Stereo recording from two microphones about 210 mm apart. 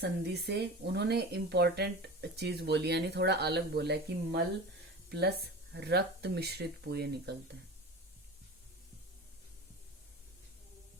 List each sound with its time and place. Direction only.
0.0 s speech: 50° right (ahead or behind)